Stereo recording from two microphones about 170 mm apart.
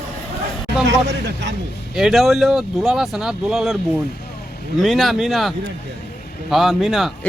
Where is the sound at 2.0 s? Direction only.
Centre (ahead or behind).